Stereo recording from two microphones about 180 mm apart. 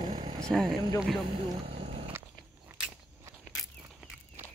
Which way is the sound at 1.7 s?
30° right (ahead or behind).